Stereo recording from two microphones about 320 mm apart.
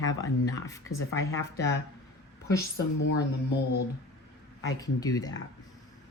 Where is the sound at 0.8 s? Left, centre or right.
Left.